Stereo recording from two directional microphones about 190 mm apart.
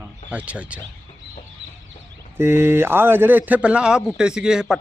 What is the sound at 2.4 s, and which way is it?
Speech, 10° right (ahead or behind).